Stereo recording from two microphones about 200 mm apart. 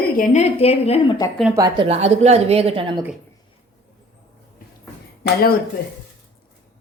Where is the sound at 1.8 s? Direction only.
30° right (ahead or behind).